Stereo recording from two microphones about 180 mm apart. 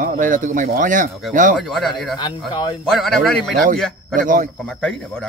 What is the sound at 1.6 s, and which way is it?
Speech, centre (ahead or behind).